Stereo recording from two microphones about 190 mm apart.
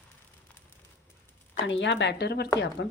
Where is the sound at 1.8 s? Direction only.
65° left (ahead or behind).